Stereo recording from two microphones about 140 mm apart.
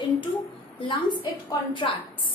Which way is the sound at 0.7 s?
40° left (ahead or behind).